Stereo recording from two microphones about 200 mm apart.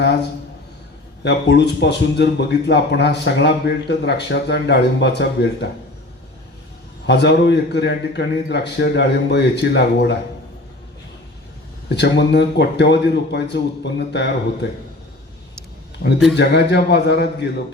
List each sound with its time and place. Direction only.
1.2 s speech: 60° left (ahead or behind)
7.1 s speech: 60° left (ahead or behind)
11.9 s speech: 60° left (ahead or behind)
16.3 s speech: 60° left (ahead or behind)